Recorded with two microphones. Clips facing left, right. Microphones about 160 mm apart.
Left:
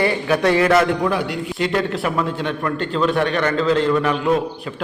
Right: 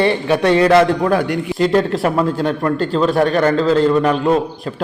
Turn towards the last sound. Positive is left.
turn(degrees=-35)  # may be behind; listen again after turning